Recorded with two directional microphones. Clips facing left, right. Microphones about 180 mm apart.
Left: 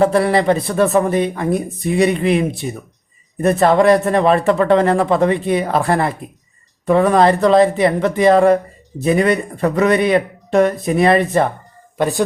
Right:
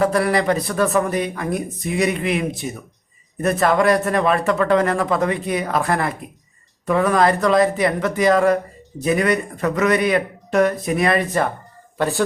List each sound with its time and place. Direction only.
0.0 s speech: 30° left (ahead or behind)
11.9 s speech: 15° left (ahead or behind)